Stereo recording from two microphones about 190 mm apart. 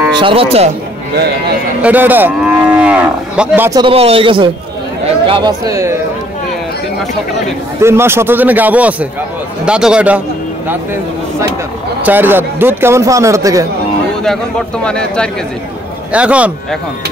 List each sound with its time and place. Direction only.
0.1 s speech: 25° right (ahead or behind)
1.8 s cattle: 10° right (ahead or behind)
3.8 s speech: 30° right (ahead or behind)
7.8 s cattle: 15° right (ahead or behind)
9.7 s speech: 5° right (ahead or behind)
12.0 s cattle: 10° right (ahead or behind)
14.2 s speech: 5° left (ahead or behind)
16.1 s cattle: 5° right (ahead or behind)